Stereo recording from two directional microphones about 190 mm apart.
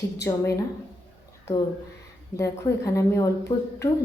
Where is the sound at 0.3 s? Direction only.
15° left (ahead or behind).